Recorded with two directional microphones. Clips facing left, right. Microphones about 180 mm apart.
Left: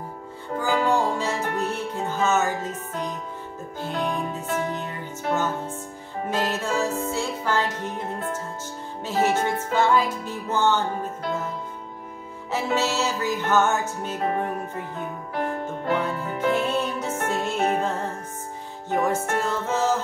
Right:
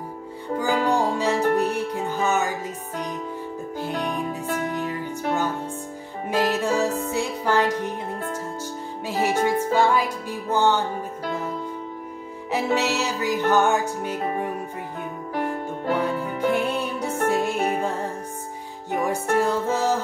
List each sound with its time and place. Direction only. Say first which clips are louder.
0.6 s music: even; 15° right (ahead or behind)
6.3 s music: right 4 dB; 15° right (ahead or behind)
12.4 s music: right 2 dB; 15° right (ahead or behind)
16.5 s music: even; 15° right (ahead or behind)